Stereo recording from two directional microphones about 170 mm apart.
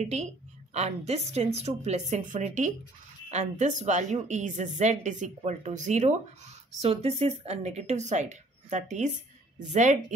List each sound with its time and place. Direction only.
0.0 s a woman's voice: 40° right (ahead or behind)